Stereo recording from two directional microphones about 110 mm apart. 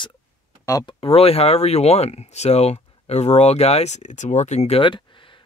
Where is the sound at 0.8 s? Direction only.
60° left (ahead or behind); by 4.8 s 80° left.